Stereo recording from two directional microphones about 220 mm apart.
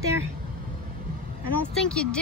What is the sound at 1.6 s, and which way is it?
Speech, 5° left (ahead or behind).